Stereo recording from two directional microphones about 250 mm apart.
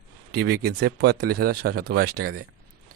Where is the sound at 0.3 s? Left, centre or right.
Right.